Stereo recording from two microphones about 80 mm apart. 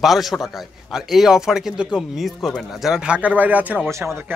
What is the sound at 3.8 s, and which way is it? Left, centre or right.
Speech, right.